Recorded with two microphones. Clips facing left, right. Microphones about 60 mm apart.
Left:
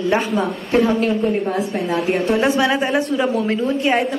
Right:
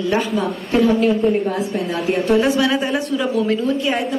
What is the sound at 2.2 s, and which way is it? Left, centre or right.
A woman's voice, left.